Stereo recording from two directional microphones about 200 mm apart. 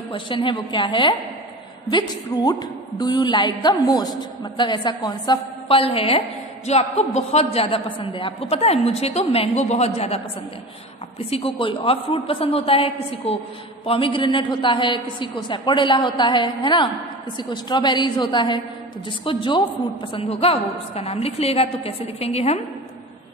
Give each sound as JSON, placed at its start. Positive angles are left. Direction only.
{"t": 0.1, "sound": "a man's voice", "side_deg": 25}
{"t": 11.2, "sound": "a man's voice", "side_deg": 30}